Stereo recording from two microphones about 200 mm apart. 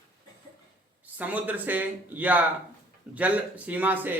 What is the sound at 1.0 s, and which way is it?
Speech, 10° right (ahead or behind).